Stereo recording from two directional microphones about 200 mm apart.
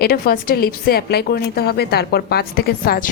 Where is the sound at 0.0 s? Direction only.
50° left (ahead or behind).